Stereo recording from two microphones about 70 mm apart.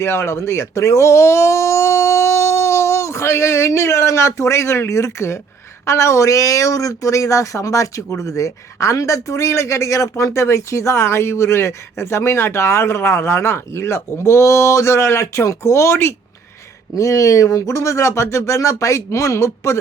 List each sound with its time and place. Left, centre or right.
0.0 s speech: left
16.9 s speech: left